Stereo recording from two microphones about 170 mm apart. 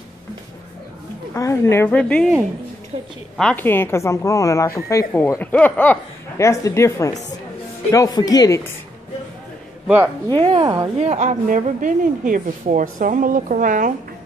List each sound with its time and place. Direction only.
1.3 s a woman's voice: 15° left (ahead or behind)
3.3 s a woman's voice: 5° left (ahead or behind)
9.8 s speech: 5° right (ahead or behind)
10.2 s a woman's voice: 25° right (ahead or behind)
11.1 s a woman's voice: 45° right (ahead or behind)